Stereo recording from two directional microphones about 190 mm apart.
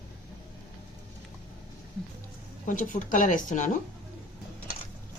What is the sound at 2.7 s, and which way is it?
Speech, 45° left (ahead or behind).